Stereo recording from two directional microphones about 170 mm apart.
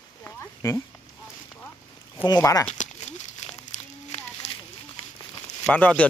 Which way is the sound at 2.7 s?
40° left (ahead or behind).